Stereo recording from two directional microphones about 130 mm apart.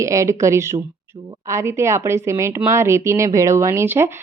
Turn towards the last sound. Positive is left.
turn(degrees=-20)  # may be behind; listen again after turning